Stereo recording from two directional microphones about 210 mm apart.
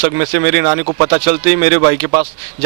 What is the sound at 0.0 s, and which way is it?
A man's voice, 15° right (ahead or behind).